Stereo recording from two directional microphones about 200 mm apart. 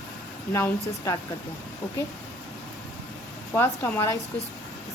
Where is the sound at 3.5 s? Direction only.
10° left (ahead or behind).